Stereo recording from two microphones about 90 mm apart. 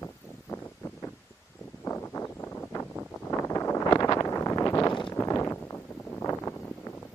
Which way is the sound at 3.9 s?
45° left (ahead or behind).